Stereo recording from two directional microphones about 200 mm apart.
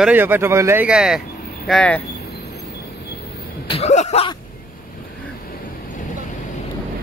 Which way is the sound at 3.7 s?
35° left (ahead or behind).